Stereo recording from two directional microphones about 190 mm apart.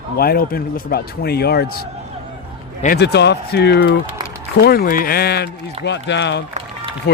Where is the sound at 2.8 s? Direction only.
55° left (ahead or behind).